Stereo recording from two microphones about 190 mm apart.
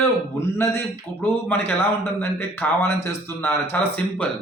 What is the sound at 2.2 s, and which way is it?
Speech, 10° left (ahead or behind).